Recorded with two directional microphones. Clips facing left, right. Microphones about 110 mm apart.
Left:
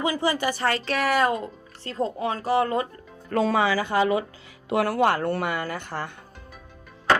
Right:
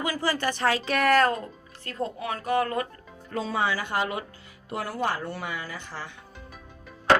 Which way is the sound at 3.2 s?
70° left (ahead or behind).